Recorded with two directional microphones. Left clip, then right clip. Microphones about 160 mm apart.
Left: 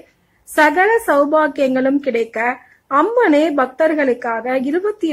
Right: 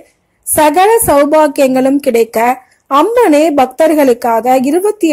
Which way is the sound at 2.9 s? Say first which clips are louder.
Right 5 dB; 25° right (ahead or behind).